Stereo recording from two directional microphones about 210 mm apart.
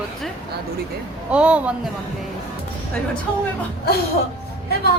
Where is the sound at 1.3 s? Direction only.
5° right (ahead or behind).